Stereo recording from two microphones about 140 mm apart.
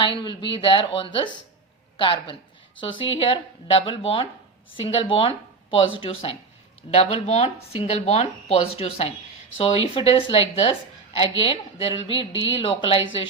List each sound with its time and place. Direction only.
0.0 s a woman's voice: 35° left (ahead or behind)